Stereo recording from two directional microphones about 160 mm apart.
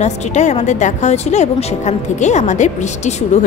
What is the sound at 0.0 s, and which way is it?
A woman's voice, 45° left (ahead or behind).